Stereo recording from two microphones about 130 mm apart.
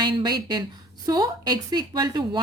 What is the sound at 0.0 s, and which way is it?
A woman's voice, 35° right (ahead or behind).